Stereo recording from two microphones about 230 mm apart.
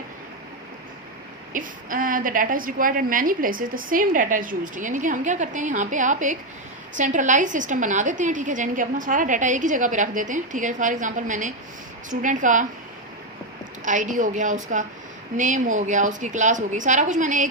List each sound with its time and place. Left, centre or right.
1.5 s a woman's voice: right
13.8 s a woman's voice: right